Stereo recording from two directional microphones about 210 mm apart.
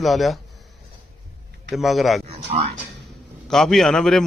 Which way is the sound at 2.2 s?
30° right (ahead or behind).